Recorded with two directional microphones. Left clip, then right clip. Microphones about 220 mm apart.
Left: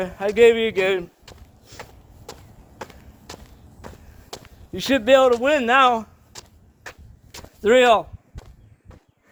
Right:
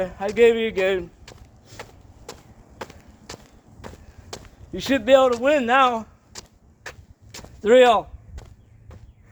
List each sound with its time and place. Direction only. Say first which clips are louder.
0.0 s a man's voice: left 2 dB; 40° left (ahead or behind)
1.2 s walk: even; 15° right (ahead or behind)
1.8 s a sound: right 1 dB; 15° right (ahead or behind)
4.7 s a man's voice: left 1 dB; 45° left (ahead or behind)
6.3 s a sound: right 1 dB; 15° right (ahead or behind)
7.6 s a man's voice: even; 45° left (ahead or behind)
8.4 s walk: even; 15° right (ahead or behind)